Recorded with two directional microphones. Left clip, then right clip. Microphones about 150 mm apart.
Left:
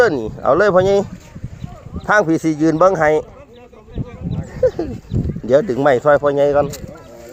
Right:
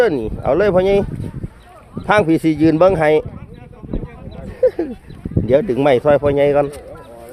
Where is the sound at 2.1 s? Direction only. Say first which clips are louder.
Right 1 dB; 20° right (ahead or behind).